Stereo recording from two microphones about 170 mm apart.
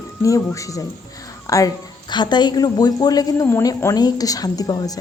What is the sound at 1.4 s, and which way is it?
Music, 20° left (ahead or behind).